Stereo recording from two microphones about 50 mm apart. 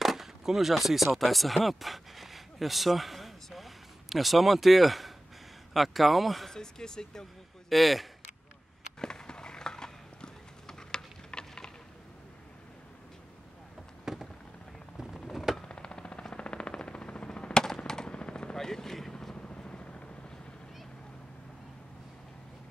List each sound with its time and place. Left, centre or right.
0.0 s speech: centre
6.5 s speech: centre
7.7 s speech: centre
9.0 s horse: centre
14.1 s a sound: centre
15.3 s a sound: centre
15.6 s a sound: centre
17.6 s gunshot: centre
19.4 s vehicle: centre